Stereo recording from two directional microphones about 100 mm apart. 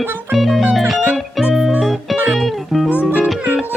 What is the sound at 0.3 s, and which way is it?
Music, centre (ahead or behind).